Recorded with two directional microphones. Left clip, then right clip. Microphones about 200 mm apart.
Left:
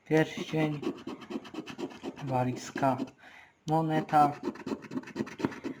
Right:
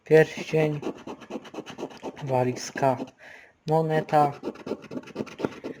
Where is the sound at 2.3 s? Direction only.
55° right (ahead or behind).